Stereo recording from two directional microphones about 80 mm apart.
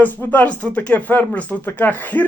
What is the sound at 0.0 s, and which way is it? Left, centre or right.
Speech, left.